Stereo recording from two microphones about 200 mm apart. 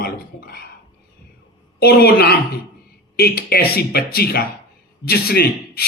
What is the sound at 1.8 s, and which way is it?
Speech, 50° left (ahead or behind).